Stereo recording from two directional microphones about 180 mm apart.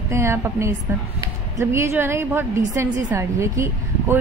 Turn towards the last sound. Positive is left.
turn(degrees=-15)  # may be behind; listen again after turning